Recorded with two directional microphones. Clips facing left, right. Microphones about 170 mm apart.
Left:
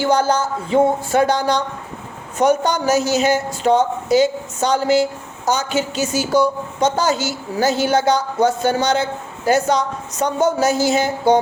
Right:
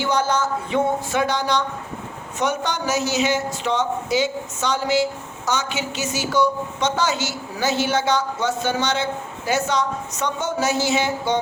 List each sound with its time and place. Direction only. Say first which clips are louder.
0.0 s a woman's voice: left 4 dB; 35° left (ahead or behind)